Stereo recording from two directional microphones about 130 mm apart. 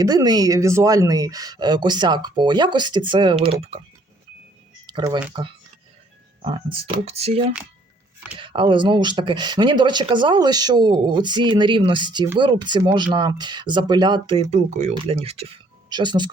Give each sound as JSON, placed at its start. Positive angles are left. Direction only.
{"t": 0.0, "sound": "speech", "side_deg": -30}
{"t": 4.9, "sound": "speech", "side_deg": -35}
{"t": 6.4, "sound": "speech", "side_deg": -40}
{"t": 8.4, "sound": "speech", "side_deg": -40}
{"t": 14.5, "sound": "speech", "side_deg": -55}
{"t": 15.9, "sound": "speech", "side_deg": -35}